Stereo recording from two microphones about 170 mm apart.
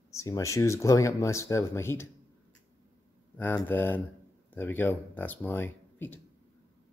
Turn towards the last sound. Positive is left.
turn(degrees=10)  # may be behind; listen again after turning